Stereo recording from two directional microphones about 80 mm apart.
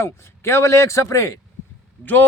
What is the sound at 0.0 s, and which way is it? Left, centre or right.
Speech, left.